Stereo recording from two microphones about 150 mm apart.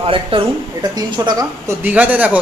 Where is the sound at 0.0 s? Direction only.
35° right (ahead or behind).